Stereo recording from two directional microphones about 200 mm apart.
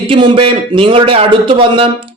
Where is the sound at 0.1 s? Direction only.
25° right (ahead or behind).